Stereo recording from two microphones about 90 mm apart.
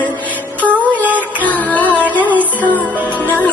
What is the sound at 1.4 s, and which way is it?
Music, 15° left (ahead or behind).